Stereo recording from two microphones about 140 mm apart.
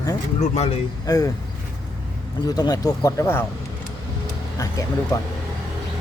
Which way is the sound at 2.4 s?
25° left (ahead or behind).